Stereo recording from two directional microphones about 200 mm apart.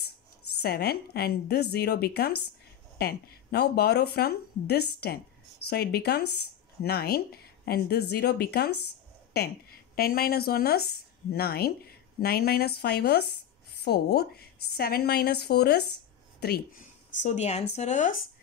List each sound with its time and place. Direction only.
0.6 s a woman's voice: 55° left (ahead or behind)
17.2 s speech: 35° left (ahead or behind)